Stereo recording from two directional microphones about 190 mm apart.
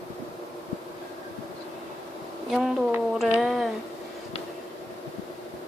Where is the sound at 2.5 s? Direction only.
Centre (ahead or behind).